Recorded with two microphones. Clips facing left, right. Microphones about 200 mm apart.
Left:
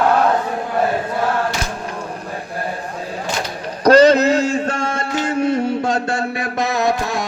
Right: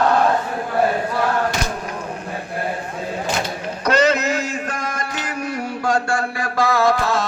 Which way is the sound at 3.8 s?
30° left (ahead or behind).